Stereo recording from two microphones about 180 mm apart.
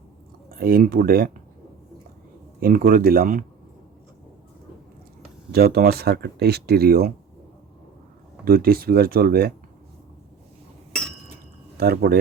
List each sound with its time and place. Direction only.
0.5 s speech: 55° right (ahead or behind)
2.6 s speech: 55° right (ahead or behind)
5.5 s speech: 60° right (ahead or behind)
8.4 s speech: 55° right (ahead or behind)
11.8 s speech: 60° right (ahead or behind)